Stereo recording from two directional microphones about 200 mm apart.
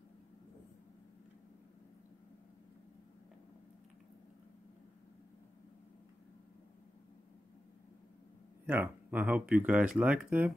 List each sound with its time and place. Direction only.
8.6 s speech: 10° right (ahead or behind)